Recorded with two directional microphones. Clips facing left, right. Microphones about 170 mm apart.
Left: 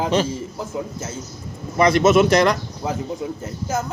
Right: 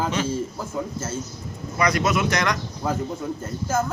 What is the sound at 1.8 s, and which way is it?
Speech, 25° left (ahead or behind).